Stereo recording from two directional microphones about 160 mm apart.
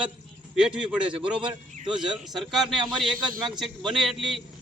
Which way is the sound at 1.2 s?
5° right (ahead or behind).